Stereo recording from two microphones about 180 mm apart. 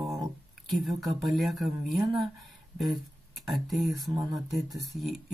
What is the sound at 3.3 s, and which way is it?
Speech, centre (ahead or behind).